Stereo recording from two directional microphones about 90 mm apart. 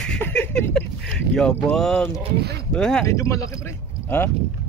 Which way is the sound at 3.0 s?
35° left (ahead or behind).